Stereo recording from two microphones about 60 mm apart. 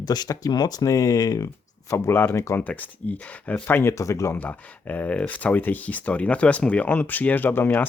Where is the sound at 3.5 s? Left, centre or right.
Left.